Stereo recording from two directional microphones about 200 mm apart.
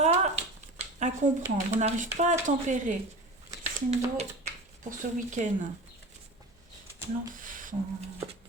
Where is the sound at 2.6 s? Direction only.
40° right (ahead or behind).